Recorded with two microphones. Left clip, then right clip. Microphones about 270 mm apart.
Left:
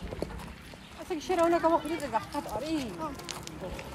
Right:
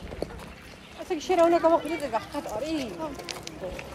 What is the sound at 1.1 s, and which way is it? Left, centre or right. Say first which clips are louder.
Speech: right 5 dB; left.